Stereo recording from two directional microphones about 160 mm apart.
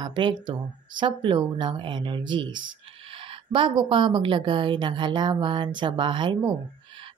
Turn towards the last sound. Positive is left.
turn(degrees=-30)  # may be behind; listen again after turning